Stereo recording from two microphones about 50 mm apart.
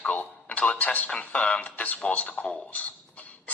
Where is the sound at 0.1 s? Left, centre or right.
Left.